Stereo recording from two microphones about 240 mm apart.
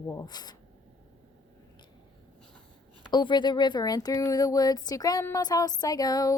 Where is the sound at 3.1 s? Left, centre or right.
Centre.